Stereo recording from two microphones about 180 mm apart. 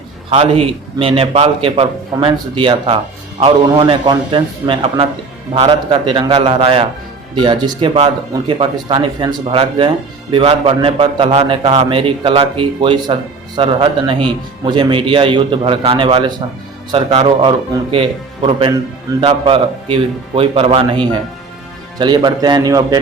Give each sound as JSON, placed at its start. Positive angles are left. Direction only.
{"t": 0.3, "sound": "a man's voice", "side_deg": -35}